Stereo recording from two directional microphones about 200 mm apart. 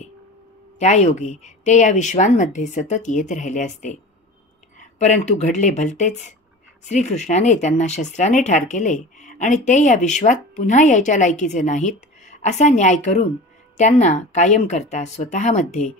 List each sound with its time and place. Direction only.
0.7 s speech: 35° left (ahead or behind)
4.7 s a sound: 35° left (ahead or behind)
5.4 s speech: 35° left (ahead or behind)